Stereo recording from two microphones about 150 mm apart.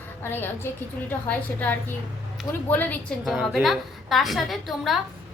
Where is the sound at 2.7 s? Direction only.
10° left (ahead or behind).